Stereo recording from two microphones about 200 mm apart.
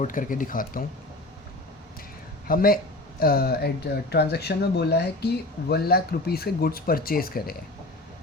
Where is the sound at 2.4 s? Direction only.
45° left (ahead or behind).